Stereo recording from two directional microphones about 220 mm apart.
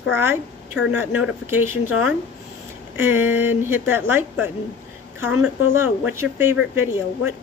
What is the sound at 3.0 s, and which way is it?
Speech, 10° right (ahead or behind).